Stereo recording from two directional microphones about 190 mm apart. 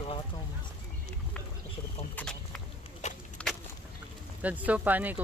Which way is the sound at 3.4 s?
5° left (ahead or behind).